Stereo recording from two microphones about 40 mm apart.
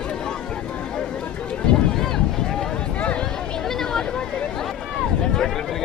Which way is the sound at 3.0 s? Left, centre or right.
Left.